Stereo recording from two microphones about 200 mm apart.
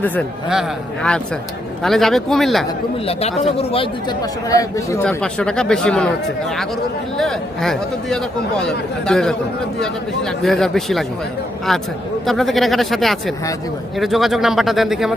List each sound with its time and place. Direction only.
1.8 s speech: centre (ahead or behind)
3.1 s speech: 30° left (ahead or behind); by 4.9 s 15° left (ahead or behind)
5.0 s speech: 5° left (ahead or behind)
7.2 s speech: centre (ahead or behind)